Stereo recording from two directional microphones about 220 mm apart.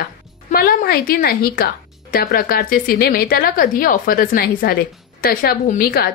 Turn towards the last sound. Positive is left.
turn(degrees=45)  # may be behind; listen again after turning